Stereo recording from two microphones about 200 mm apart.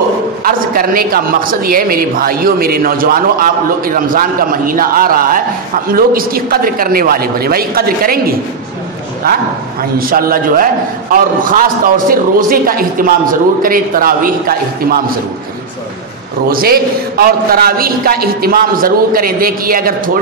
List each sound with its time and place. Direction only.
0.4 s a man's voice: 45° right (ahead or behind)
9.2 s a man's voice: 45° right (ahead or behind)
16.4 s a man's voice: 50° right (ahead or behind)